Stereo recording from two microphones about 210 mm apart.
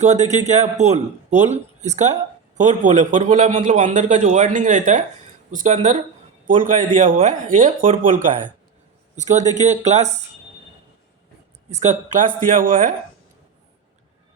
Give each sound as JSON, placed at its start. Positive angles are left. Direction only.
{"t": 0.0, "sound": "a man's voice", "side_deg": -35}
{"t": 11.7, "sound": "a man's voice", "side_deg": -35}